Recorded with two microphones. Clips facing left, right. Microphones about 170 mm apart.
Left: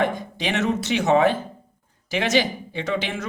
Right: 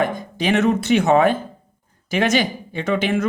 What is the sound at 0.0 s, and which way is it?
Speech, 45° right (ahead or behind).